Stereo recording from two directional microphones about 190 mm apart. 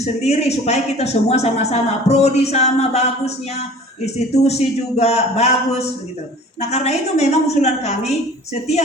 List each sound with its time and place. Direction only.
0.0 s speech: 35° left (ahead or behind)